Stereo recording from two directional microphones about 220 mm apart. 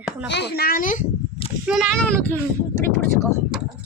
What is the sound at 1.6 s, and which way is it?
Speech, 5° right (ahead or behind).